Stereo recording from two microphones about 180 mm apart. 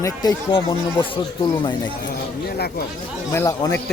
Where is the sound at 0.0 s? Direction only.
20° left (ahead or behind).